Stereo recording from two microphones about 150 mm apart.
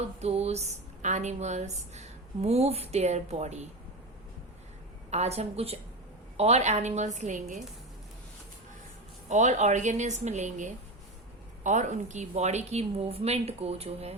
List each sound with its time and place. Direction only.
0.0 s a woman's voice: 45° right (ahead or behind)
5.1 s a woman's voice: 45° right (ahead or behind)
9.3 s a woman's voice: 50° right (ahead or behind)